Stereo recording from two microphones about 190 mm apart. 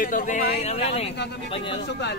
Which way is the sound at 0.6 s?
35° left (ahead or behind).